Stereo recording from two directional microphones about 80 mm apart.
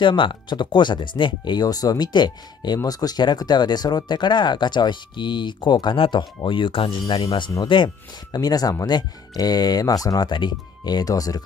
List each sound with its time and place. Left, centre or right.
0.0 s speech: left
8.4 s speech: left
10.3 s speech: left